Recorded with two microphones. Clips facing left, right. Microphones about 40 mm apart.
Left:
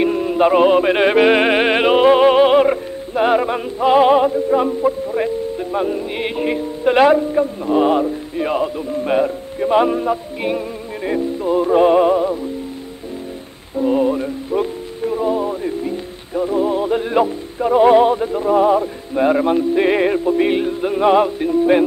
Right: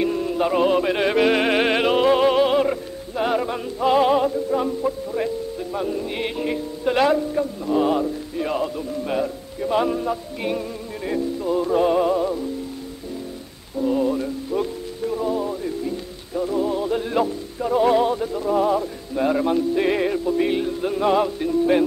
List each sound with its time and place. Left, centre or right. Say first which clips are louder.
0.0 s music: left 6 dB; left
13.7 s music: left 5 dB; left